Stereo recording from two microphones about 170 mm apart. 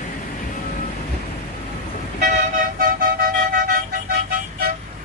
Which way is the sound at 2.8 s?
60° right (ahead or behind).